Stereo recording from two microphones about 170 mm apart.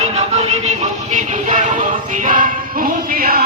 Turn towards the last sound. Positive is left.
turn(degrees=-60)  # may be behind; listen again after turning